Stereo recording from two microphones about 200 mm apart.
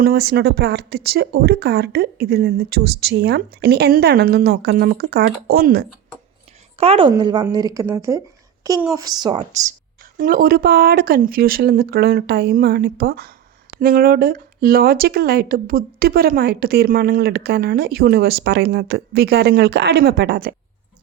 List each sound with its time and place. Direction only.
0.0 s speech: 50° right (ahead or behind)
6.7 s a woman's voice: 30° right (ahead or behind)
9.5 s speech: 35° right (ahead or behind)